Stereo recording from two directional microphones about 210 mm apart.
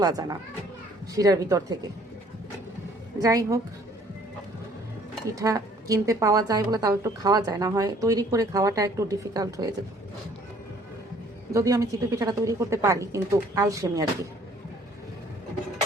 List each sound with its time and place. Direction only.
0.0 s a woman's voice: 15° right (ahead or behind)
3.2 s a woman's voice: 15° right (ahead or behind)
5.3 s a woman's voice: 15° right (ahead or behind)
11.5 s a woman's voice: 15° right (ahead or behind)